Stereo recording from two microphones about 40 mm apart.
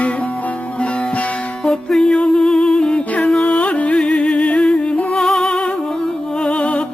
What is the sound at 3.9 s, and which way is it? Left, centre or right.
Music, centre.